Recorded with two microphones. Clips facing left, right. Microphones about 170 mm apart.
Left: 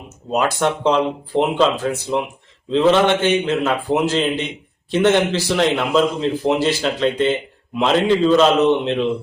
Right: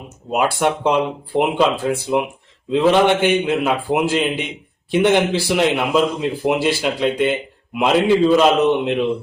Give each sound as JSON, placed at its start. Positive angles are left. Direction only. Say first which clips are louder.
{"t": 0.3, "sound": "speech", "louder": "right 1 dB", "side_deg": -10}